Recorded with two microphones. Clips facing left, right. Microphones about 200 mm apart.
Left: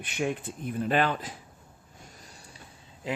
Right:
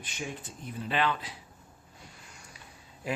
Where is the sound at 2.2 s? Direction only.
35° left (ahead or behind).